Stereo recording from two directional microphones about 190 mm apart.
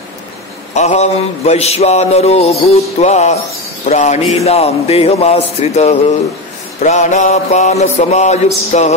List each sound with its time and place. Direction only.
0.7 s mantra: 35° left (ahead or behind)